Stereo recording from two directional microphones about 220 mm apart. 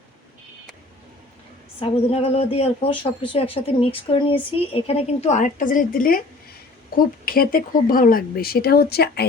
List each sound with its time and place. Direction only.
1.8 s speech: 25° left (ahead or behind); by 9.2 s 45° left (ahead or behind)